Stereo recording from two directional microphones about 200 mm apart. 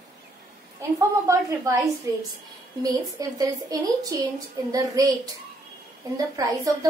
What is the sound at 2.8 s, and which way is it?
A woman's voice, 20° right (ahead or behind).